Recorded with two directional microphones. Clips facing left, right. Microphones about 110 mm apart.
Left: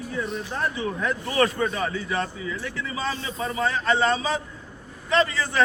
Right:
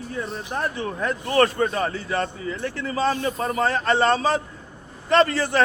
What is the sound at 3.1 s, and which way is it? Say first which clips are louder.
A man's voice: right 5 dB; 55° right (ahead or behind).